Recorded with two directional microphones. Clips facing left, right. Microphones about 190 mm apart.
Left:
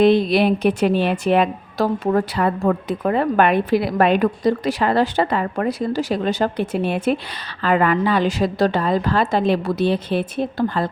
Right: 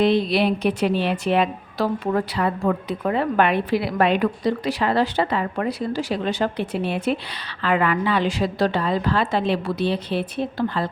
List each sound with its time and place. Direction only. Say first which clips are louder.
0.0 s speech: left 4 dB; 50° left (ahead or behind)